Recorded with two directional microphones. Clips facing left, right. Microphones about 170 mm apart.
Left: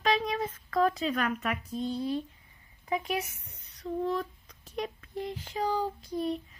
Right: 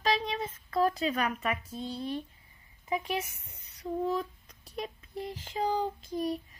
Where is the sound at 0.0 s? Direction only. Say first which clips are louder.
Left 2 dB; 30° right (ahead or behind).